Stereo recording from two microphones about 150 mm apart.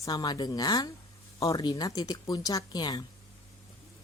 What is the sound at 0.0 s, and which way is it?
A woman's voice, 25° left (ahead or behind).